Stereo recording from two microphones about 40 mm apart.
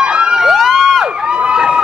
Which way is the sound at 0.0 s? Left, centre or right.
Right.